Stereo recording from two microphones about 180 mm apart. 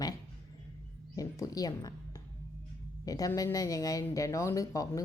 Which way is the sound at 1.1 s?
20° left (ahead or behind).